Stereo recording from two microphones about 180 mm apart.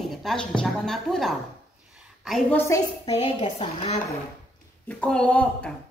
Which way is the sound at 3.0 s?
30° left (ahead or behind).